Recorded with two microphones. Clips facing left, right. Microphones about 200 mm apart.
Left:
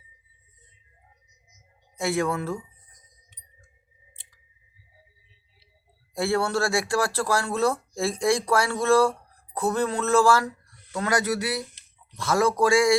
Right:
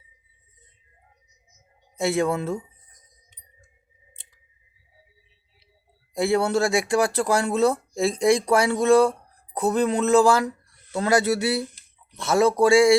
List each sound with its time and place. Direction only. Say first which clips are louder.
2.0 s speech: right 3 dB; 25° right (ahead or behind)
6.1 s speech: right 3 dB; 20° right (ahead or behind)